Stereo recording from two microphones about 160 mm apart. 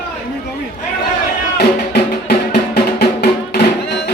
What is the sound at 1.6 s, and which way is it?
Music, 75° left (ahead or behind).